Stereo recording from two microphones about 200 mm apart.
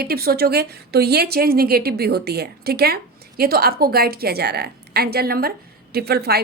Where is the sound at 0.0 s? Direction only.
50° right (ahead or behind).